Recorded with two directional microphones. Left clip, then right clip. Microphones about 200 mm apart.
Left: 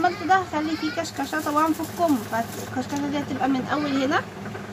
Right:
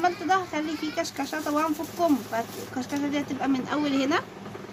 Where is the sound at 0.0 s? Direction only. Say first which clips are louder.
Left 4 dB; 30° right (ahead or behind).